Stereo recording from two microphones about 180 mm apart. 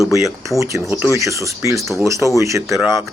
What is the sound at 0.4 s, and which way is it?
Speech, 15° right (ahead or behind).